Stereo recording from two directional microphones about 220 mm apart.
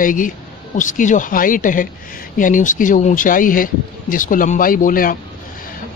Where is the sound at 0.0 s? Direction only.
35° left (ahead or behind).